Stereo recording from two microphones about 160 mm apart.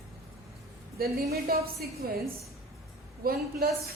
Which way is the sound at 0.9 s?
75° right (ahead or behind).